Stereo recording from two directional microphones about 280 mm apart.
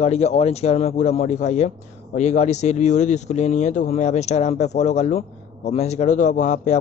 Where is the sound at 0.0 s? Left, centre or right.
Left.